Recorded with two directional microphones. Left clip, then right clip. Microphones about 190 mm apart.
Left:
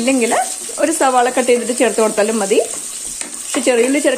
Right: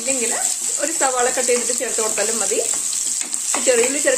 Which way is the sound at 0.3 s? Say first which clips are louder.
Left 6 dB; 45° left (ahead or behind).